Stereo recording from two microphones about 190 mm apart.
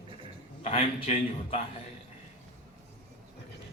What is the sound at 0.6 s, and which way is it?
Speech, 35° left (ahead or behind).